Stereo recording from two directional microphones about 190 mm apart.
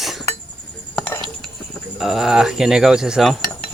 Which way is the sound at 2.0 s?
Centre (ahead or behind).